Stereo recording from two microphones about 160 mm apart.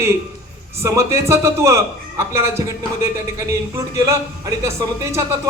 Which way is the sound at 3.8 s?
20° right (ahead or behind).